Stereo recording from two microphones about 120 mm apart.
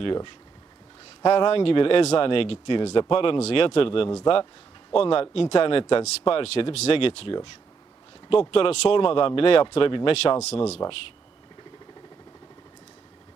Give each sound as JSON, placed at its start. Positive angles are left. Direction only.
{"t": 0.0, "sound": "speech", "side_deg": 45}
{"t": 10.3, "sound": "speech", "side_deg": 60}